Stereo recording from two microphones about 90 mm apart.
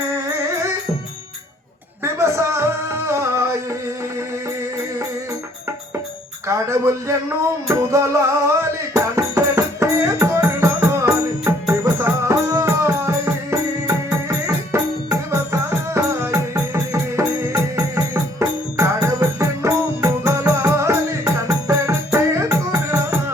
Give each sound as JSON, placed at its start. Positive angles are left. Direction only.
{"t": 0.1, "sound": "music", "side_deg": -35}
{"t": 2.0, "sound": "music", "side_deg": -30}
{"t": 6.5, "sound": "music", "side_deg": -30}